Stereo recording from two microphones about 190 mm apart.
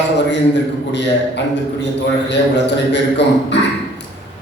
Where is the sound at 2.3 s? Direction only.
65° left (ahead or behind).